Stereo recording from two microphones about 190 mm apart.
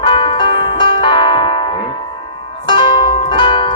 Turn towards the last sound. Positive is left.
turn(degrees=25)  # may be behind; listen again after turning